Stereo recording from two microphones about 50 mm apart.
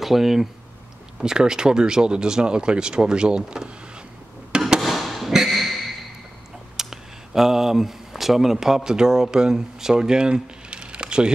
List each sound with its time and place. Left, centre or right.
0.0 s speech: centre
4.5 s a sound: centre
4.8 s thump: centre
6.8 s speech: centre